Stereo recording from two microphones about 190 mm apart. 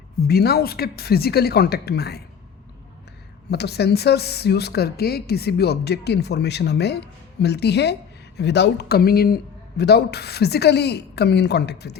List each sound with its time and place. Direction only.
0.3 s speech: 55° left (ahead or behind)
3.5 s speech: 60° left (ahead or behind)